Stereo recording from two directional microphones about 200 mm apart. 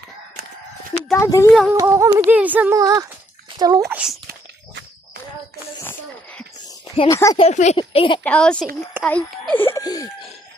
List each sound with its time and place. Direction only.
1.1 s a child's voice: 15° left (ahead or behind)
1.7 s a child's voice: 15° right (ahead or behind)
3.8 s a woman's voice: 5° right (ahead or behind)
5.8 s a sound: 10° left (ahead or behind)
7.1 s a child's voice: 15° left (ahead or behind)
7.3 s speech: 35° left (ahead or behind)
8.2 s a woman's voice: 5° left (ahead or behind)
9.0 s a sound: 5° left (ahead or behind)